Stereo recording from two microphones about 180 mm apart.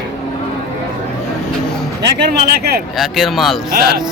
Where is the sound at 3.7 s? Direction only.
60° right (ahead or behind).